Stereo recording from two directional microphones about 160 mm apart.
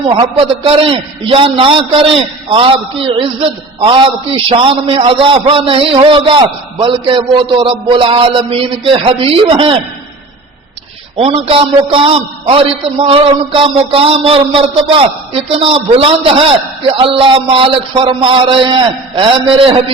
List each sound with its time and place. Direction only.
0.1 s a man's voice: 35° right (ahead or behind)
4.4 s a man's voice: 35° right (ahead or behind)
11.2 s a man's voice: 35° right (ahead or behind)